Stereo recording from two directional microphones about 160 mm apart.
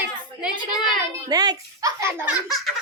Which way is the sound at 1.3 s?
25° right (ahead or behind).